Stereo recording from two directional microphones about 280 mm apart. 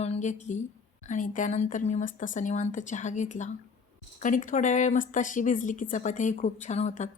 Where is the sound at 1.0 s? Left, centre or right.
Left.